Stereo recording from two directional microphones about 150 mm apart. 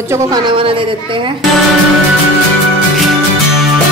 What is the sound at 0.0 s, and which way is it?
Speech, 20° right (ahead or behind).